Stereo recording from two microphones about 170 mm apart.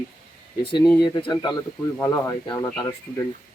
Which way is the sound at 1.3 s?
25° left (ahead or behind).